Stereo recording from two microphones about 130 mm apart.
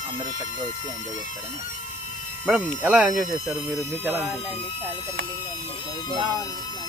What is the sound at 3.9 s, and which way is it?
Speech, 15° right (ahead or behind).